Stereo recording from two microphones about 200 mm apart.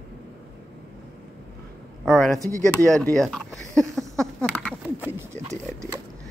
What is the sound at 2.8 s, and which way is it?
Speech, 5° left (ahead or behind).